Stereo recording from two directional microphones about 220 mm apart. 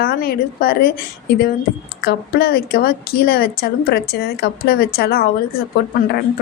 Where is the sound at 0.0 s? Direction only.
45° left (ahead or behind).